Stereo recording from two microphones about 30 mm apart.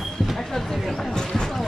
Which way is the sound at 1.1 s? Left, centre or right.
Left.